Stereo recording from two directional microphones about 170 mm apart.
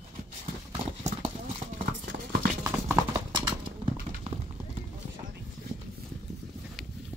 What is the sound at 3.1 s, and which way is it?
Clip-clop, 30° right (ahead or behind).